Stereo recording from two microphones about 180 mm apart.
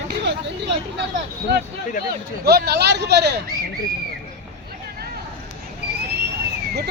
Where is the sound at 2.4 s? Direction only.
65° right (ahead or behind).